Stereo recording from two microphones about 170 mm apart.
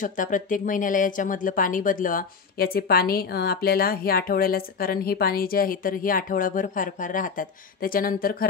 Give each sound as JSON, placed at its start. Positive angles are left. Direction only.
{"t": 0.0, "sound": "speech", "side_deg": 50}